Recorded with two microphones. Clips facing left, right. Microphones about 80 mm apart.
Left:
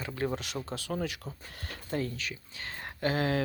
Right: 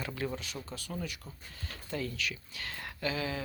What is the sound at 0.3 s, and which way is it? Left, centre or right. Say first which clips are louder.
Speech: left 5 dB; left.